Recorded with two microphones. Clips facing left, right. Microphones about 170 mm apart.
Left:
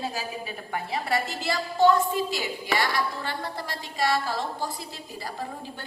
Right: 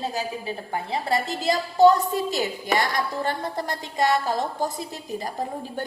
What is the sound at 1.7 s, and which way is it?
A woman's voice, 40° right (ahead or behind).